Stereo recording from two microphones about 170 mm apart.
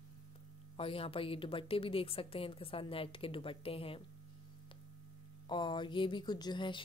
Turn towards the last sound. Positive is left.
turn(degrees=30)  # may be behind; listen again after turning